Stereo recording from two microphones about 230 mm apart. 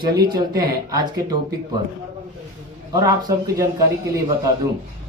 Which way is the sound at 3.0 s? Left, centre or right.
Centre.